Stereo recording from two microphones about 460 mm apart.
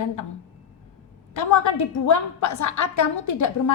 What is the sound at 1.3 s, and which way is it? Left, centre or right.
A woman's voice, left.